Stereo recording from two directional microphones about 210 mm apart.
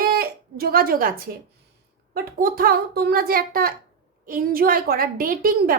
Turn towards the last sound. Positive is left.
turn(degrees=-45)  # may be behind; listen again after turning